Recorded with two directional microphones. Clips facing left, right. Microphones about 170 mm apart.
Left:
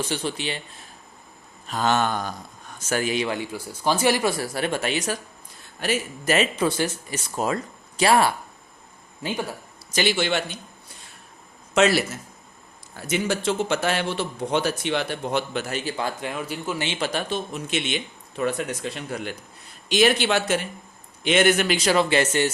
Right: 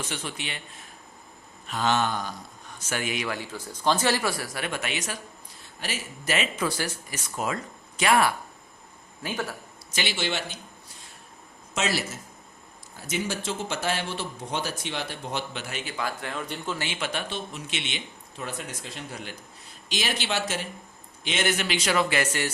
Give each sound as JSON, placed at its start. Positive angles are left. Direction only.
{"t": 0.0, "sound": "speech", "side_deg": 30}
{"t": 1.6, "sound": "speech", "side_deg": 40}
{"t": 2.7, "sound": "speech", "side_deg": 40}
{"t": 5.8, "sound": "speech", "side_deg": 50}
{"t": 6.6, "sound": "speech", "side_deg": 25}
{"t": 7.3, "sound": "speech", "side_deg": 35}
{"t": 9.2, "sound": "speech", "side_deg": 15}
{"t": 9.9, "sound": "a man's voice", "side_deg": 45}
{"t": 11.7, "sound": "a man's voice", "side_deg": 65}
{"t": 17.0, "sound": "speech", "side_deg": 40}
{"t": 18.3, "sound": "a man's voice", "side_deg": 65}
{"t": 21.8, "sound": "speech", "side_deg": 30}